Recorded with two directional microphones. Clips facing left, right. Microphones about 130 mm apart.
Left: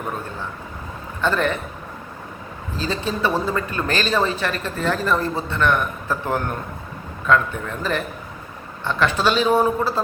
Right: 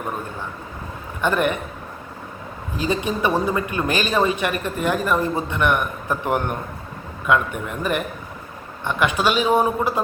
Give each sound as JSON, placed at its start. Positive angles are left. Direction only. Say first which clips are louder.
{"t": 1.2, "sound": "speech", "louder": "right 1 dB", "side_deg": -15}
{"t": 2.7, "sound": "speech", "louder": "right 2 dB", "side_deg": -15}